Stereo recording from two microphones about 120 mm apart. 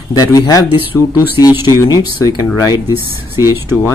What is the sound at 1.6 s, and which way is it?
Speech, 35° left (ahead or behind).